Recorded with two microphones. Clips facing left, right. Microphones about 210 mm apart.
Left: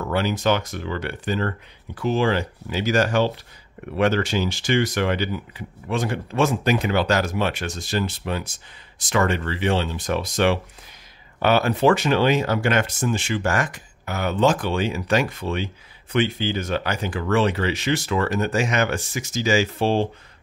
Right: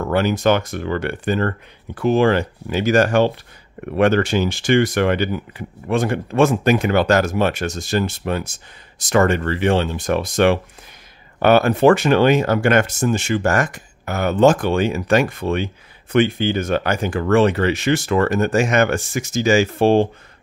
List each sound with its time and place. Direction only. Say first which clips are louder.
0.0 s speech: right 5 dB; 50° right (ahead or behind)